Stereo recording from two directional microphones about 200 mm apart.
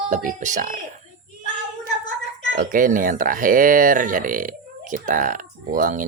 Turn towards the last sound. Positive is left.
turn(degrees=-40)  # may be behind; listen again after turning